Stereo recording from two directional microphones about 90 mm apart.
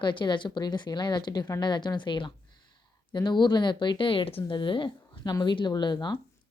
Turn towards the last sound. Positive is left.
turn(degrees=55)  # may be behind; listen again after turning